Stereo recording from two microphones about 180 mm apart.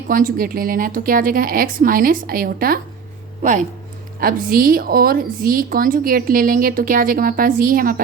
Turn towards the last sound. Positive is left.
turn(degrees=-50)  # may be behind; listen again after turning